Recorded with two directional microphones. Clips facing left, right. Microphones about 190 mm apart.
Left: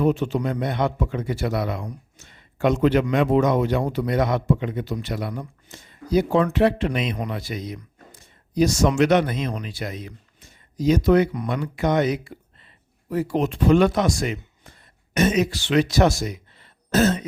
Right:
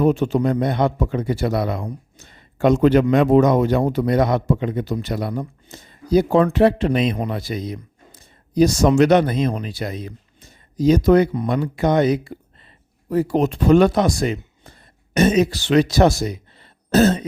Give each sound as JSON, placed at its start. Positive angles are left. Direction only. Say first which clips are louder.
{"t": 0.0, "sound": "a man's voice", "louder": "right 4 dB", "side_deg": -45}
{"t": 0.6, "sound": "speech", "louder": "right 4 dB", "side_deg": -35}